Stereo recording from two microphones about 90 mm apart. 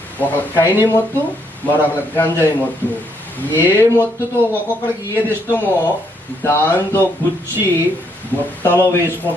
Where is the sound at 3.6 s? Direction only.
25° left (ahead or behind).